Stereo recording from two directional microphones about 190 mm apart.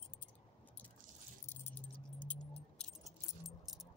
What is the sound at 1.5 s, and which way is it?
Keys jangling, 10° left (ahead or behind).